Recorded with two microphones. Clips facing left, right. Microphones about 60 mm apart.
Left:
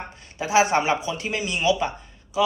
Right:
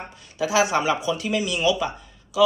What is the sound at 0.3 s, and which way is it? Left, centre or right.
A man's voice, left.